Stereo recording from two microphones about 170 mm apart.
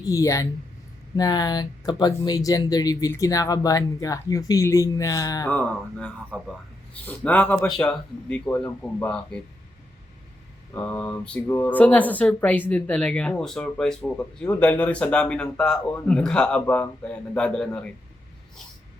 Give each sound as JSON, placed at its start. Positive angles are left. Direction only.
{"t": 0.0, "sound": "speech", "side_deg": 20}
{"t": 5.5, "sound": "speech", "side_deg": 10}
{"t": 10.8, "sound": "speech", "side_deg": 10}